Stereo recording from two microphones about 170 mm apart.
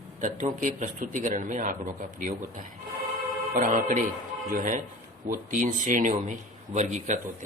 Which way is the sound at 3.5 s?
50° right (ahead or behind).